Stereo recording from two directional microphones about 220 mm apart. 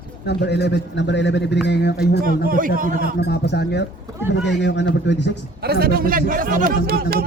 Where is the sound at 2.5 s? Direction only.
40° right (ahead or behind).